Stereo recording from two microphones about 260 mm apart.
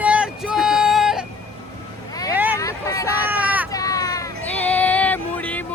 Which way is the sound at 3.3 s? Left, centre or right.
Centre.